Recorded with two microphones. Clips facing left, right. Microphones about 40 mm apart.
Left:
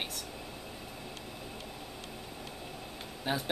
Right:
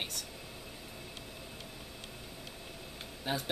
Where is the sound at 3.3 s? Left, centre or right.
Centre.